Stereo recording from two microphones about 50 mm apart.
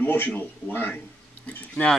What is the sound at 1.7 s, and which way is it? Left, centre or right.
Speech, centre.